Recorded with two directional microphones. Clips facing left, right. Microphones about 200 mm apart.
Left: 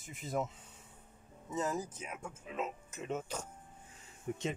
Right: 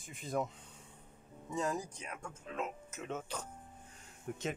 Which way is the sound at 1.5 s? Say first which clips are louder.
Even; 5° left (ahead or behind).